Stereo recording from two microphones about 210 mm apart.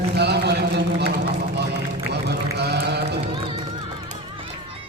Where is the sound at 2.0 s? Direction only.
50° right (ahead or behind).